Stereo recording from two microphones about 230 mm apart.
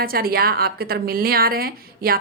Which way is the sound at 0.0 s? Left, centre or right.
Right.